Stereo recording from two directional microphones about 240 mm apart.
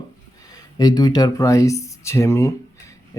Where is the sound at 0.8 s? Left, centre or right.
Centre.